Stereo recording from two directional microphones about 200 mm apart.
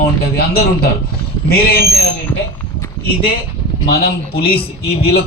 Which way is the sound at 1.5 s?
50° left (ahead or behind).